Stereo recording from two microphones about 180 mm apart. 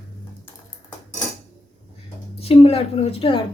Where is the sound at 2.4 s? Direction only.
35° left (ahead or behind).